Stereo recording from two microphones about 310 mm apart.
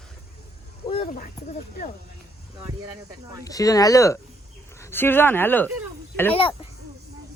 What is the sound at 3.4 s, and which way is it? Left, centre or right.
Speech, centre.